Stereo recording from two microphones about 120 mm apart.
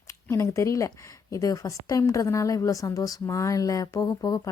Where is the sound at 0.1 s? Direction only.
25° left (ahead or behind).